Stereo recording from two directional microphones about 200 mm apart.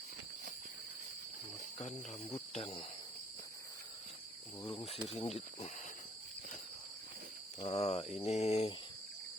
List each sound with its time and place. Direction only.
1.8 s mantra: 35° left (ahead or behind)
5.1 s speech: 30° left (ahead or behind)
7.6 s mantra: 30° left (ahead or behind)